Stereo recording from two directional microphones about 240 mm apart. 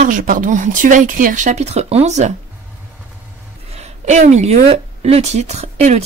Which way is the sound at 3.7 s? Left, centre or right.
Right.